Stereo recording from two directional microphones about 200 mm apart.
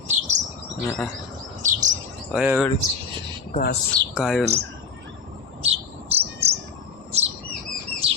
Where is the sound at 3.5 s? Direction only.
50° left (ahead or behind).